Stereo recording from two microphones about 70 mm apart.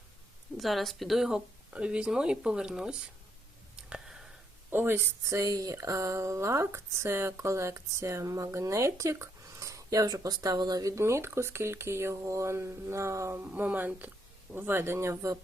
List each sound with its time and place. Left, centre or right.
0.5 s speech: centre
1.7 s speech: centre
3.8 s a sound: centre
4.7 s speech: right
13.4 s speech: right